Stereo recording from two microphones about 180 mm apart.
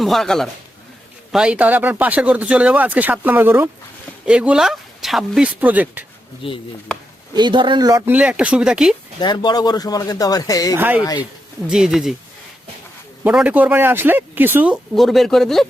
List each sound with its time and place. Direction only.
0.0 s speech: centre (ahead or behind)
6.4 s speech: 30° left (ahead or behind)
7.3 s speech: 25° right (ahead or behind); by 9.0 s 5° right (ahead or behind)
9.2 s speech: 25° left (ahead or behind)
10.8 s speech: 10° right (ahead or behind)
13.2 s speech: 10° right (ahead or behind)